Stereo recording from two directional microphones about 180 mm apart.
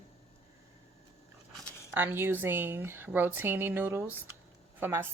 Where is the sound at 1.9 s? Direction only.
10° right (ahead or behind).